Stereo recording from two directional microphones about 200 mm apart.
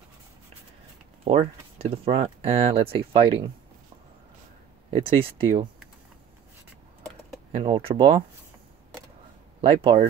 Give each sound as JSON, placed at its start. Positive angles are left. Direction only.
{"t": 1.2, "sound": "speech", "side_deg": -30}
{"t": 4.9, "sound": "speech", "side_deg": -25}
{"t": 7.5, "sound": "speech", "side_deg": -25}
{"t": 9.6, "sound": "speech", "side_deg": -25}